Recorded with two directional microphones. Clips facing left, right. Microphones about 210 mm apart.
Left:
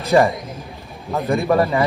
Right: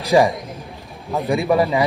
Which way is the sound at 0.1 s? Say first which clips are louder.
Even; 10° right (ahead or behind).